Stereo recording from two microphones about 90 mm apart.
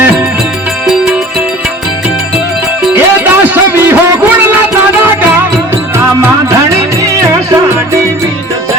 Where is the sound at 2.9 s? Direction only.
20° right (ahead or behind).